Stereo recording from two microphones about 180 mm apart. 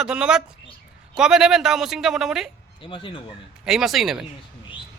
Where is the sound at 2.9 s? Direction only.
30° left (ahead or behind).